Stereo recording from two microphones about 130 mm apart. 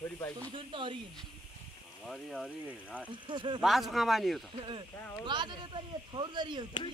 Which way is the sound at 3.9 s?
Centre (ahead or behind).